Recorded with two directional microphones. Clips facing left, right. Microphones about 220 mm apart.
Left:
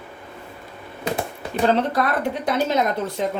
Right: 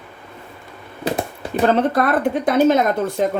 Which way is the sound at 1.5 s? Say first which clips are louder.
Right 3 dB; 50° right (ahead or behind).